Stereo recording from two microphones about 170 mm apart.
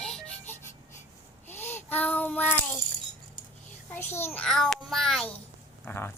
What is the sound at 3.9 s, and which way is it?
A child's voice, 15° left (ahead or behind).